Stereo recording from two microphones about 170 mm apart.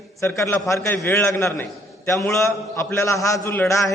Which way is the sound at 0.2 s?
15° left (ahead or behind).